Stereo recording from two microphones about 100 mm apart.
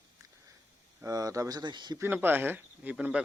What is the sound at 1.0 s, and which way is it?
Speech, 35° right (ahead or behind).